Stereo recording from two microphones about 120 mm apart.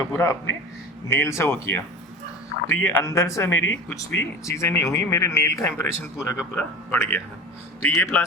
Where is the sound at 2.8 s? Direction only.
20° left (ahead or behind).